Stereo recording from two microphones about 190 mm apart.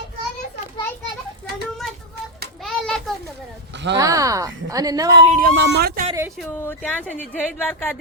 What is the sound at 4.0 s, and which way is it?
Speech, 15° right (ahead or behind).